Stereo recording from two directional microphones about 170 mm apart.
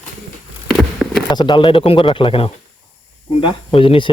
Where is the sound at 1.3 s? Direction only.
25° left (ahead or behind).